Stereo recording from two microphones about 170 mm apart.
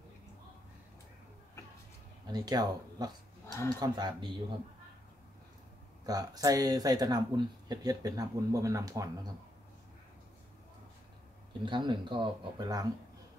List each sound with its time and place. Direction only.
2.2 s speech: 25° right (ahead or behind)
6.0 s speech: 20° right (ahead or behind)
11.6 s speech: 30° right (ahead or behind)